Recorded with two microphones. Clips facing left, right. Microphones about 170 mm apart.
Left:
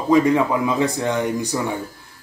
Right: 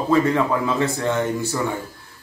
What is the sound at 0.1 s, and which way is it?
A man's voice, 15° left (ahead or behind).